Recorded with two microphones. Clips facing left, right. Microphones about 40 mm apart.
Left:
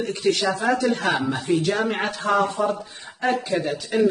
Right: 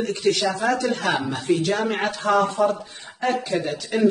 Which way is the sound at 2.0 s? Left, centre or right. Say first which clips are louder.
Right 3 dB; centre.